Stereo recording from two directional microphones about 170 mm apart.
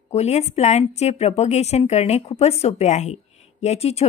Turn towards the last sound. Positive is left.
turn(degrees=35)  # may be behind; listen again after turning